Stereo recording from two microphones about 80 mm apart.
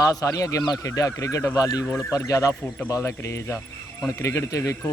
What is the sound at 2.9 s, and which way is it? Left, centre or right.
Speech, left.